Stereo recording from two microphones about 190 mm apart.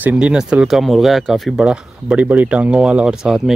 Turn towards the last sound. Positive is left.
turn(degrees=-5)  # may be behind; listen again after turning